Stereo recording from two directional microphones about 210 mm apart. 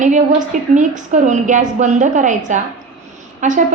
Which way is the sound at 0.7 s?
35° right (ahead or behind).